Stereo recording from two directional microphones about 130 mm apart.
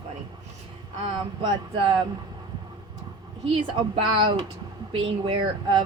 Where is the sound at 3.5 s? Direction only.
45° right (ahead or behind).